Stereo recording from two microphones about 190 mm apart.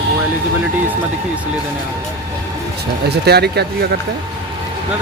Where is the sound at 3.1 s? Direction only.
60° right (ahead or behind).